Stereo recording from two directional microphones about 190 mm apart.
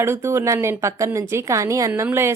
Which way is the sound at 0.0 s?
15° right (ahead or behind).